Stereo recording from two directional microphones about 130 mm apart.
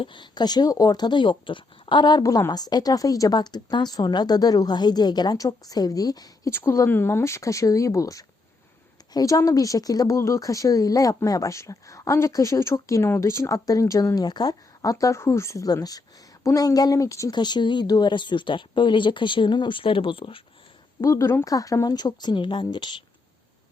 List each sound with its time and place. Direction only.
0.0 s speech: 35° left (ahead or behind)
6.5 s speech: 20° left (ahead or behind); by 20.4 s 40° left (ahead or behind)
21.0 s speech: 25° left (ahead or behind)